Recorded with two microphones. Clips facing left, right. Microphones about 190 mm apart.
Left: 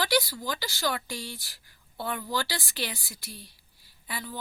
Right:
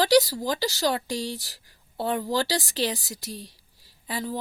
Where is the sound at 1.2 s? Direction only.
90° right.